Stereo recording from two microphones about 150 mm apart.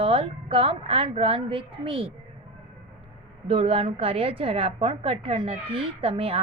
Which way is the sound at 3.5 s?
40° right (ahead or behind).